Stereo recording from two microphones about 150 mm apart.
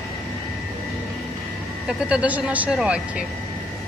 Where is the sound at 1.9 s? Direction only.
5° right (ahead or behind).